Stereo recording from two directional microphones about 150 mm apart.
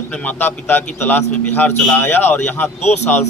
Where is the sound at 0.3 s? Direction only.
10° left (ahead or behind).